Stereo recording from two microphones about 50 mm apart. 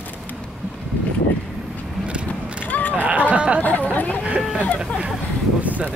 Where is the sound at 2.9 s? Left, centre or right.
Right.